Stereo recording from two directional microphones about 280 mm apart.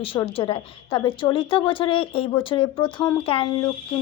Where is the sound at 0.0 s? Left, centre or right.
Centre.